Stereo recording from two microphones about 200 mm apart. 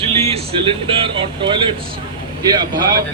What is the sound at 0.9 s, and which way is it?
A man's voice, 25° right (ahead or behind).